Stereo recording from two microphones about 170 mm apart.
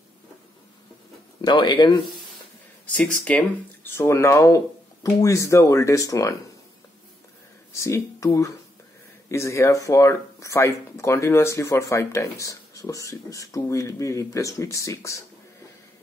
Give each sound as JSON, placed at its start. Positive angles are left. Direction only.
{"t": 1.4, "sound": "speech", "side_deg": 25}
{"t": 3.3, "sound": "speech", "side_deg": 10}
{"t": 7.7, "sound": "speech", "side_deg": 15}
{"t": 9.3, "sound": "speech", "side_deg": 15}